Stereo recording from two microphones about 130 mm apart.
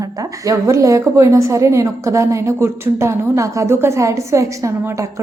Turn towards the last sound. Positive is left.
turn(degrees=-25)  # may be behind; listen again after turning